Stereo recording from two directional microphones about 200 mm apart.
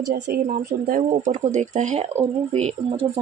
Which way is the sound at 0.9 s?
40° right (ahead or behind).